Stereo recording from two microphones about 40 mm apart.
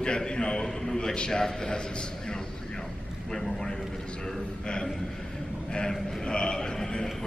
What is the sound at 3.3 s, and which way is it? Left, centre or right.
A man's voice, centre.